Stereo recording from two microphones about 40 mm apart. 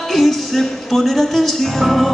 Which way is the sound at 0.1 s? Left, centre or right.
Centre.